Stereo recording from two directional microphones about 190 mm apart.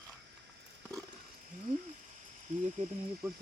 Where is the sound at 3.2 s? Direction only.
15° right (ahead or behind).